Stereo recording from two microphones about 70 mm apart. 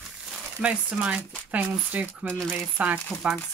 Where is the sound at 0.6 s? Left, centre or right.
Centre.